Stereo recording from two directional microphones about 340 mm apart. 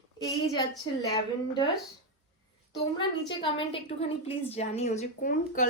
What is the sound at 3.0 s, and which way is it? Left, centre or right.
A woman's voice, centre.